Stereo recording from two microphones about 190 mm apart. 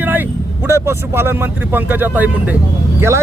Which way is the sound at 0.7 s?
15° right (ahead or behind).